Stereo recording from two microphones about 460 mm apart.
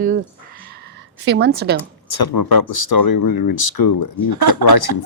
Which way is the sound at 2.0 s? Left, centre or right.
Left.